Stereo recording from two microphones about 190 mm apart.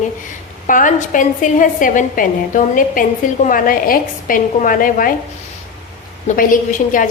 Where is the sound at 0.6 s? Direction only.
45° left (ahead or behind).